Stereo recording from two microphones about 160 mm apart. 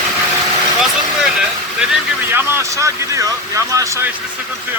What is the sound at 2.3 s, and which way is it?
Speech, 20° right (ahead or behind).